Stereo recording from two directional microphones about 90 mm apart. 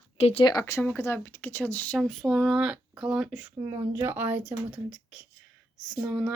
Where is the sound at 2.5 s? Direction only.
10° right (ahead or behind).